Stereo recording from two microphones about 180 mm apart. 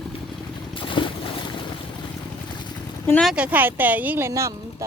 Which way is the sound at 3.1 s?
5° left (ahead or behind).